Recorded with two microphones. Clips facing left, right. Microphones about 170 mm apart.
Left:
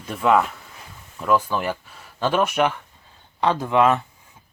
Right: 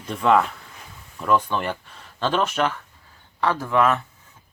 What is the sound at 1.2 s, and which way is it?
Speech, 5° left (ahead or behind).